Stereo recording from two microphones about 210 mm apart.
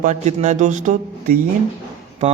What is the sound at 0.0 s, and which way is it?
A man's voice, 35° right (ahead or behind).